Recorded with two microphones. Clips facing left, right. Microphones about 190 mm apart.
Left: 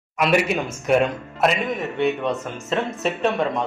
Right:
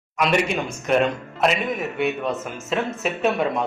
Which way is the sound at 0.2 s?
5° left (ahead or behind).